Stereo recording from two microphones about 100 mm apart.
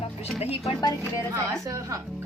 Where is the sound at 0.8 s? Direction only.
35° left (ahead or behind).